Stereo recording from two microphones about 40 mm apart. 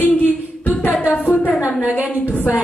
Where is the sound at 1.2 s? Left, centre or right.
Left.